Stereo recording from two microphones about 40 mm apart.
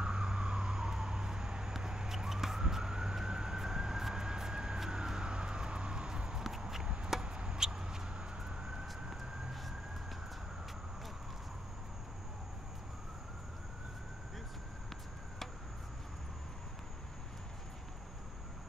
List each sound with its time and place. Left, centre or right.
0.0 s vehicle: right
3.3 s emergency vehicle: centre
4.7 s vehicle: centre